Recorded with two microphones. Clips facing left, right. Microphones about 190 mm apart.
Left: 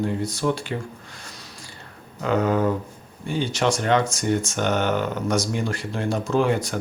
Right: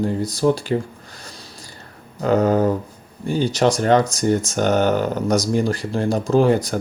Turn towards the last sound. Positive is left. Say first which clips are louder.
# right 5 dB
turn(degrees=-35)  # may be behind; listen again after turning